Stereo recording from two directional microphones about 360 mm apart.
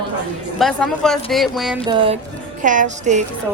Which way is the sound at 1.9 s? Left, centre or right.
Centre.